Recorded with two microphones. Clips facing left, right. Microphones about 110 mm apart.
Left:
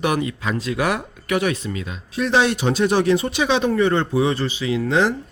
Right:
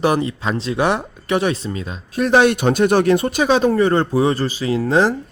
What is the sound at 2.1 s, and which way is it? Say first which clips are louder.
A man's voice: right 4 dB; 50° right (ahead or behind).